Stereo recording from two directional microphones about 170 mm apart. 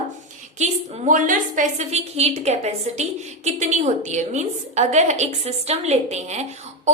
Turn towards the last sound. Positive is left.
turn(degrees=-40)  # may be behind; listen again after turning